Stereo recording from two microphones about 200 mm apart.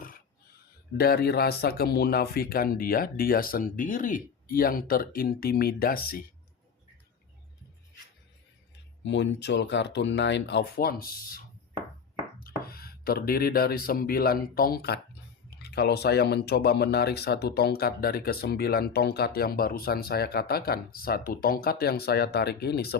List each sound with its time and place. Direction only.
0.9 s speech: 50° left (ahead or behind)
9.0 s speech: 65° left (ahead or behind)